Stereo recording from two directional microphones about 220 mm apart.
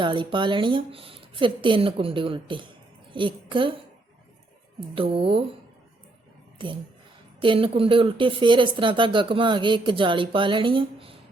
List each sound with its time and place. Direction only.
0.0 s a woman's voice: 20° right (ahead or behind)
4.9 s speech: 25° right (ahead or behind)
7.3 s speech: 25° right (ahead or behind)